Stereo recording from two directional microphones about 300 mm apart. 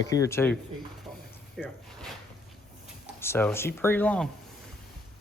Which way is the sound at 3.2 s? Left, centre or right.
Centre.